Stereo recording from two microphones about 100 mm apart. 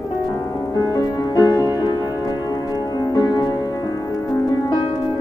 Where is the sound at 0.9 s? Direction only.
35° left (ahead or behind).